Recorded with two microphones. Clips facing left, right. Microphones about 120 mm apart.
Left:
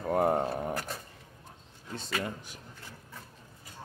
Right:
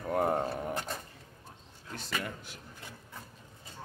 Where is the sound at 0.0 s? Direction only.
30° left (ahead or behind).